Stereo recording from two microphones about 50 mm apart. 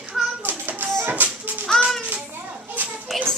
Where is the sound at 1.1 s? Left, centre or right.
Right.